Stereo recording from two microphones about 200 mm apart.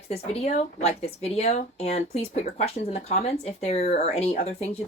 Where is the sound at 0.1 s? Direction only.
30° left (ahead or behind).